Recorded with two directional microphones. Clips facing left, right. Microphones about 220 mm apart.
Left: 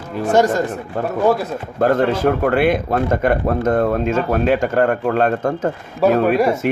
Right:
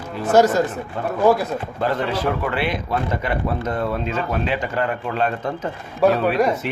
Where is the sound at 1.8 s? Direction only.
50° left (ahead or behind).